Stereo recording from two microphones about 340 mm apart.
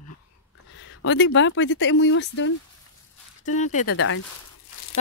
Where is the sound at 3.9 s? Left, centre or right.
Left.